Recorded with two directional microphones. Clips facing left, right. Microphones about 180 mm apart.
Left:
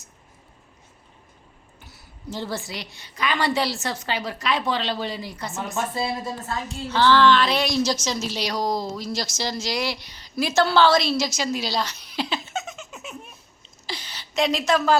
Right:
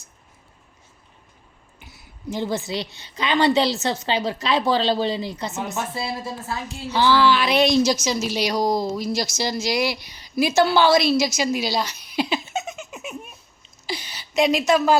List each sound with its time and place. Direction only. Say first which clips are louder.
1.8 s a woman's voice: right 4 dB; 15° right (ahead or behind)
6.5 s a woman's voice: right 1 dB; 10° right (ahead or behind)